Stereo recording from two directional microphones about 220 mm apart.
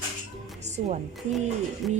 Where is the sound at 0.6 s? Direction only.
30° right (ahead or behind).